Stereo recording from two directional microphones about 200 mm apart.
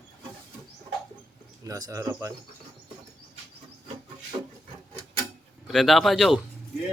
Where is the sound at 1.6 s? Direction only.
15° right (ahead or behind).